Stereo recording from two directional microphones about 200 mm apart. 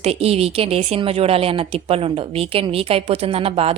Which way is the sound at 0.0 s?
30° right (ahead or behind).